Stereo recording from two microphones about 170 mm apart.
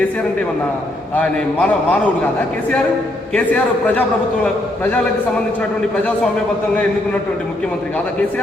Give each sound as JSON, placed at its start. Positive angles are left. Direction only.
{"t": 1.1, "sound": "a man's voice", "side_deg": 5}
{"t": 3.3, "sound": "a man's voice", "side_deg": 10}